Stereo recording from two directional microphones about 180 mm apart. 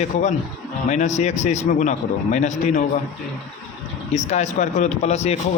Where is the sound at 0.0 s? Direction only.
40° left (ahead or behind).